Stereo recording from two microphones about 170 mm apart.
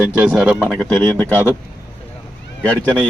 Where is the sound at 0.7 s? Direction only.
10° left (ahead or behind).